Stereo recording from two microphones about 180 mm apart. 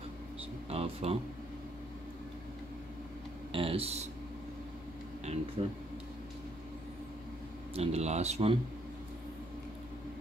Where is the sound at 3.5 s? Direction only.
30° right (ahead or behind).